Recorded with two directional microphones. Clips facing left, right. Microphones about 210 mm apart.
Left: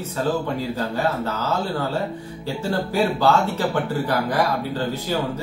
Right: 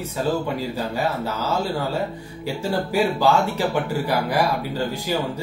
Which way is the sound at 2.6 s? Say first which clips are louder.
Even; 10° right (ahead or behind).